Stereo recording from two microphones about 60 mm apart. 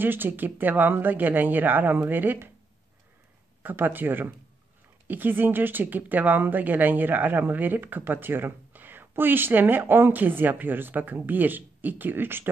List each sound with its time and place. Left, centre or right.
0.0 s speech: right
3.6 s speech: right